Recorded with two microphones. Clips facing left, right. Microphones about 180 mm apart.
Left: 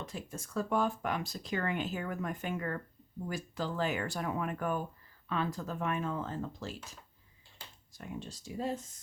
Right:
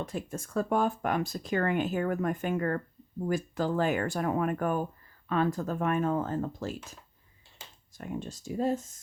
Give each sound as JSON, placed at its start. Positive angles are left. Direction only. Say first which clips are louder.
{"t": 0.0, "sound": "speech", "louder": "right 7 dB", "side_deg": -50}
{"t": 7.9, "sound": "speech", "louder": "right 6 dB", "side_deg": -50}